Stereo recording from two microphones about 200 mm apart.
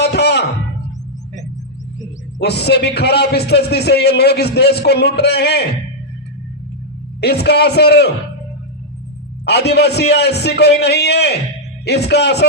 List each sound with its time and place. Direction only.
0.0 s music: 55° left (ahead or behind)
2.4 s a man's voice: 55° left (ahead or behind)
7.2 s a man's voice: 55° left (ahead or behind)
9.5 s a man's voice: 55° left (ahead or behind)